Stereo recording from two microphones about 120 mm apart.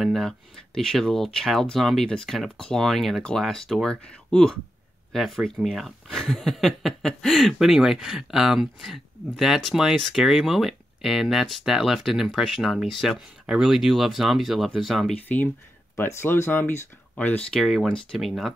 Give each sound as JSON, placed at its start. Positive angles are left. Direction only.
{"t": 0.0, "sound": "speech", "side_deg": 0}
{"t": 15.1, "sound": "speech", "side_deg": 15}